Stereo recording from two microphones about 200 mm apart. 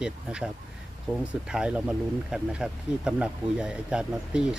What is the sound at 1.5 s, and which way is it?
Speech, 5° right (ahead or behind).